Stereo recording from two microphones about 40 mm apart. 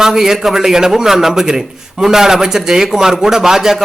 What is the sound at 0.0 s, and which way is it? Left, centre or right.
A man's voice, centre.